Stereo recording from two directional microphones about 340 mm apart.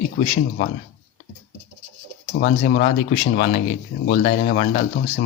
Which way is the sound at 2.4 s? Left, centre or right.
Left.